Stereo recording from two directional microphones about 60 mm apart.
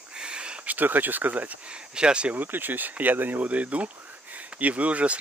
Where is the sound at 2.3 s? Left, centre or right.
Right.